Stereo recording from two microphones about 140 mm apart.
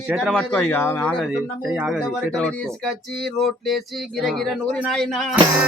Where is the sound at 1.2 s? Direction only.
5° right (ahead or behind).